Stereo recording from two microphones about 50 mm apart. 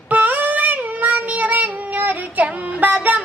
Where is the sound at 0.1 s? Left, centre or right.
Right.